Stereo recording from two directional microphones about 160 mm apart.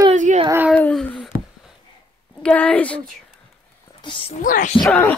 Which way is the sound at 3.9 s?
30° left (ahead or behind).